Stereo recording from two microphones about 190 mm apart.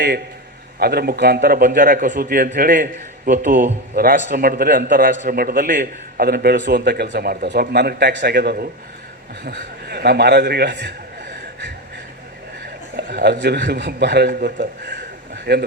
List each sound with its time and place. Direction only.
0.8 s a man's voice: 55° right (ahead or behind)
13.0 s a man's voice: 60° right (ahead or behind)